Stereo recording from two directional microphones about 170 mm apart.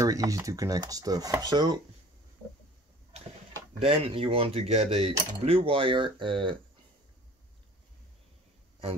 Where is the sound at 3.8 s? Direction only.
35° right (ahead or behind).